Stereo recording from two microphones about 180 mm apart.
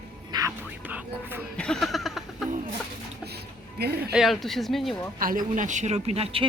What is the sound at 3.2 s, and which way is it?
Music, 65° right (ahead or behind).